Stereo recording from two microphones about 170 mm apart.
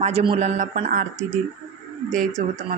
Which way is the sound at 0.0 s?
35° right (ahead or behind).